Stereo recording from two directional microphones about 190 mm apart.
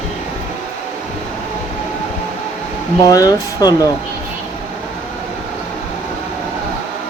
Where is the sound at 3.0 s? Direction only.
20° left (ahead or behind).